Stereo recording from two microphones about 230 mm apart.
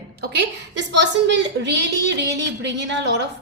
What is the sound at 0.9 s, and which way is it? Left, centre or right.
A woman's voice, right.